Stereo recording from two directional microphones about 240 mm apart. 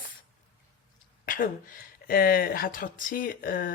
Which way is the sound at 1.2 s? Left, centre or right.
Left.